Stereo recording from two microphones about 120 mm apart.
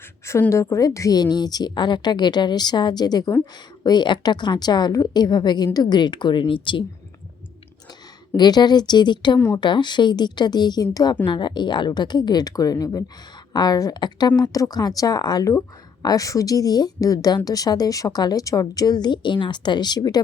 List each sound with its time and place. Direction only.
0.5 s a woman's voice: 25° left (ahead or behind); by 6.8 s 45° left (ahead or behind)
8.4 s a woman's voice: 35° left (ahead or behind)